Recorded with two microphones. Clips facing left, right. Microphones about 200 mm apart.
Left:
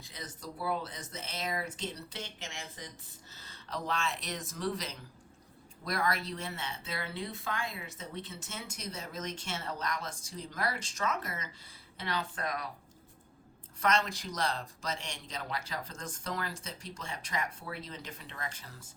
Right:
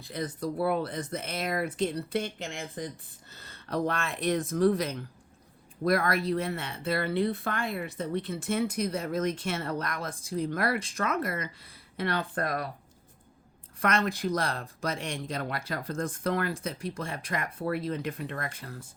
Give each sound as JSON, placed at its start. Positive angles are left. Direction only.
{"t": 0.0, "sound": "speech", "side_deg": -55}
{"t": 13.7, "sound": "speech", "side_deg": -55}